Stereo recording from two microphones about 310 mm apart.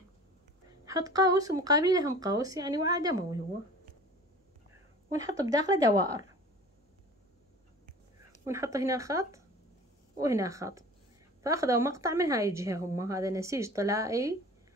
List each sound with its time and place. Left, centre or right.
0.8 s a woman's voice: centre
5.1 s a woman's voice: centre
8.5 s a woman's voice: centre